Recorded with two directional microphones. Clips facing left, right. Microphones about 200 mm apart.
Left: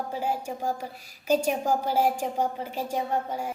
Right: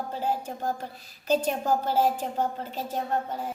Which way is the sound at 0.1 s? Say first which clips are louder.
Even; 10° left (ahead or behind).